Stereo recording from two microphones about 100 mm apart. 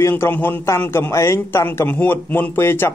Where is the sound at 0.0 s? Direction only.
20° left (ahead or behind).